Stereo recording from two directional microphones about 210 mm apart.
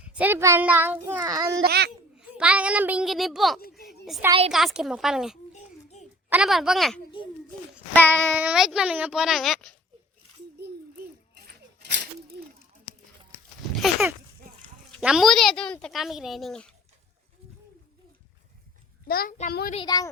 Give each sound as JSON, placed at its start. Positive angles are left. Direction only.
{"t": 0.0, "sound": "a child's voice", "side_deg": -5}
{"t": 1.6, "sound": "a child's voice", "side_deg": -50}
{"t": 2.1, "sound": "a woman's voice", "side_deg": -5}
{"t": 4.3, "sound": "a woman's voice", "side_deg": -30}
{"t": 4.5, "sound": "speech", "side_deg": 0}
{"t": 5.5, "sound": "a sound", "side_deg": 35}
{"t": 6.3, "sound": "speech", "side_deg": 0}
{"t": 7.9, "sound": "child singing", "side_deg": 5}
{"t": 8.4, "sound": "speech", "side_deg": -5}
{"t": 11.8, "sound": "a sound", "side_deg": -55}
{"t": 15.0, "sound": "speech", "side_deg": 0}
{"t": 19.0, "sound": "a child's voice", "side_deg": 45}
{"t": 19.7, "sound": "speech", "side_deg": 20}